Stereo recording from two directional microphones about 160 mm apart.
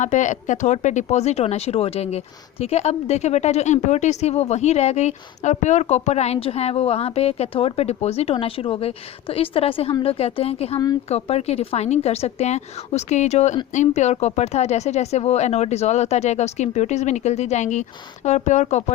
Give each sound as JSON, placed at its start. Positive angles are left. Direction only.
{"t": 0.0, "sound": "speech", "side_deg": 50}